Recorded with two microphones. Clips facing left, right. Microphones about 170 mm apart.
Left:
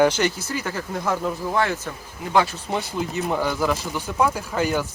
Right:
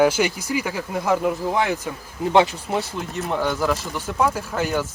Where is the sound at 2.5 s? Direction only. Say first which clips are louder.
Even; centre (ahead or behind).